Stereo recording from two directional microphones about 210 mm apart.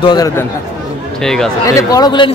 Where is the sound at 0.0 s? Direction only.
20° left (ahead or behind).